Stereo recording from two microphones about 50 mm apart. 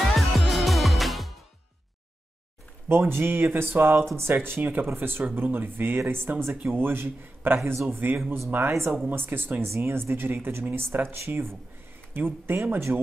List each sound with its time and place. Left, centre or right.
0.1 s music: centre
2.9 s a man's voice: right